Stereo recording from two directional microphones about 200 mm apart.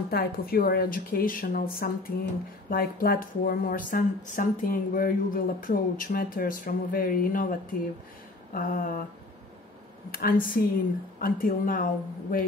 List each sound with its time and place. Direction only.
0.1 s a woman's voice: 50° left (ahead or behind)
8.5 s a woman's voice: 45° left (ahead or behind)
10.1 s a woman's voice: 45° left (ahead or behind)